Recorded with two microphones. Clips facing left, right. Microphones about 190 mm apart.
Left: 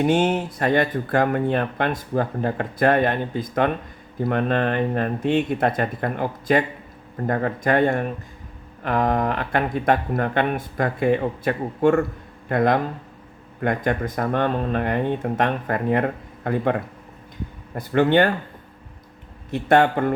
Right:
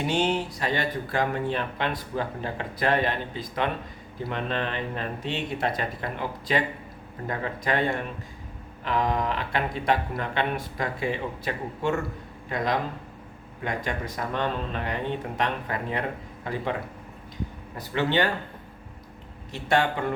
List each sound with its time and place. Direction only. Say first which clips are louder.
0.0 s speech: left 6 dB; 50° left (ahead or behind)
17.7 s speech: left 8 dB; 50° left (ahead or behind)
19.5 s speech: left 7 dB; 55° left (ahead or behind)